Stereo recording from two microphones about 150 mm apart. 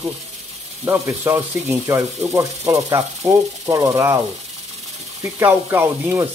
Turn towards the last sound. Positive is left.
turn(degrees=-15)  # may be behind; listen again after turning